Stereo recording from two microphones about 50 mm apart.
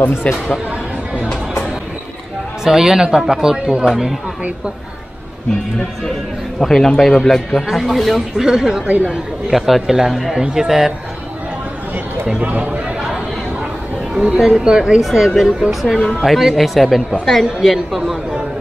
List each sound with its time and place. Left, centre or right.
0.1 s speech: left
2.6 s speech: centre
6.6 s a man's voice: centre
8.5 s speech: centre
8.8 s speech: right
9.5 s speech: centre
12.4 s speech: right
14.1 s speech: centre
15.0 s speech: centre
17.6 s speech: centre